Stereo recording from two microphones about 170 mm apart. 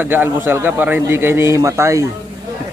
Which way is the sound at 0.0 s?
10° right (ahead or behind).